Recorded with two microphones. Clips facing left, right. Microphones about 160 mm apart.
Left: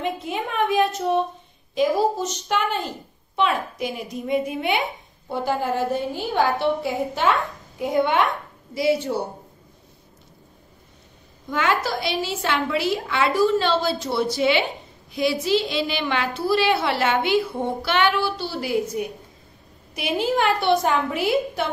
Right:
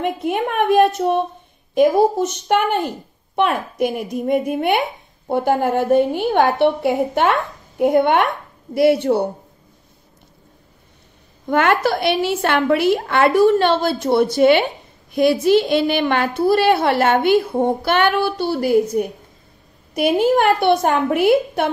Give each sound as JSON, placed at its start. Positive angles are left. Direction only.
{"t": 0.0, "sound": "a woman's voice", "side_deg": -60}
{"t": 11.4, "sound": "a woman's voice", "side_deg": -60}